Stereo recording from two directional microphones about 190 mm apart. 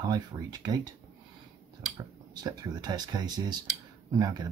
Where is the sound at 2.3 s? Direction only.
20° right (ahead or behind).